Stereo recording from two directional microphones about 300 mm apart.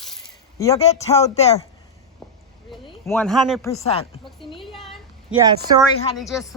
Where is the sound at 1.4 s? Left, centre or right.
Left.